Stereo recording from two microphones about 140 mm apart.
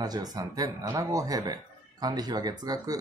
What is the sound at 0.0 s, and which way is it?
Speech, 30° right (ahead or behind).